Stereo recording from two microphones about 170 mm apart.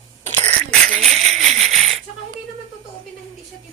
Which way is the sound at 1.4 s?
Centre (ahead or behind).